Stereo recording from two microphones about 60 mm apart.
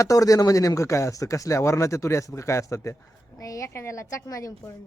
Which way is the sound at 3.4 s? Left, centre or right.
Left.